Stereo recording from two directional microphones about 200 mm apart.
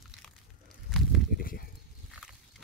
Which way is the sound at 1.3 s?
50° left (ahead or behind).